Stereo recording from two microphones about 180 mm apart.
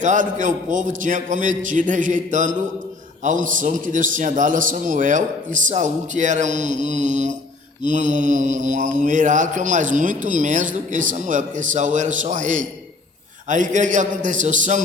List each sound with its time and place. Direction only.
0.0 s mantra: 45° right (ahead or behind)